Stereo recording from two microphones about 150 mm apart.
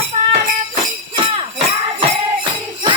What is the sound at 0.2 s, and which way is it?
Music, 55° right (ahead or behind).